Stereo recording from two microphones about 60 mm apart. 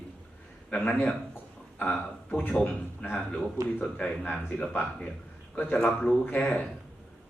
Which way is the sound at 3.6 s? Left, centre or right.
Right.